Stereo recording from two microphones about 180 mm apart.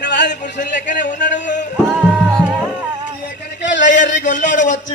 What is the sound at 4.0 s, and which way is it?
Speech, 45° left (ahead or behind).